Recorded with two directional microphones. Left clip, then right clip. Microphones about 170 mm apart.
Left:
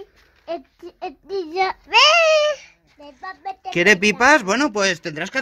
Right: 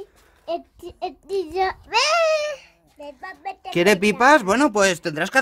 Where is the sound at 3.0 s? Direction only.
20° left (ahead or behind).